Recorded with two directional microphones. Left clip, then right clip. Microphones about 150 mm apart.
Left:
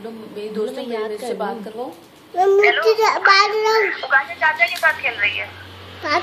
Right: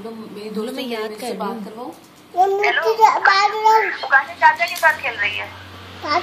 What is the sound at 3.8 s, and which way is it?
Speech, 20° right (ahead or behind).